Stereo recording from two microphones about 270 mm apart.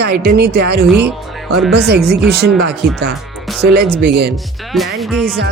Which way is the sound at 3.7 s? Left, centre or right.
Right.